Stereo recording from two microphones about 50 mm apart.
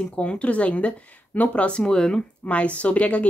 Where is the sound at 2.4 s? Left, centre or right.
Left.